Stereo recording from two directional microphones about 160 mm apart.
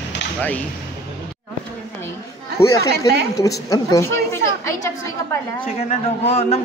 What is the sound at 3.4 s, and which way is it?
A woman's voice, 20° left (ahead or behind).